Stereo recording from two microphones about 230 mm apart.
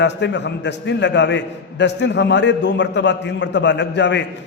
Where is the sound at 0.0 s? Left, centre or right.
Left.